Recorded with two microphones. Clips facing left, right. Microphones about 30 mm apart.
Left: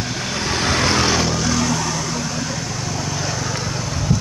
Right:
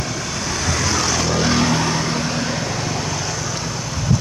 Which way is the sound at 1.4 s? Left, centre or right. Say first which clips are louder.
Right 2 dB; right.